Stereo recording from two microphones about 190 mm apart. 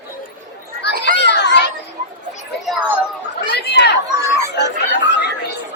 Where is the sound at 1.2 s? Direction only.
65° left (ahead or behind).